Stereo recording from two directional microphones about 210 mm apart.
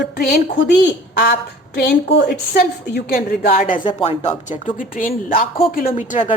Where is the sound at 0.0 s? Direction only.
50° left (ahead or behind).